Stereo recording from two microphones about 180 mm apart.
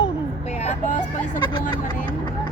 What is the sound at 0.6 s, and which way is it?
Speech, 40° left (ahead or behind).